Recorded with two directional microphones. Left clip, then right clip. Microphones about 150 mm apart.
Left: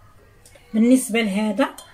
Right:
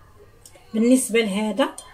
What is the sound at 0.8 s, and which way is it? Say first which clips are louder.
Speech: even; 20° right (ahead or behind).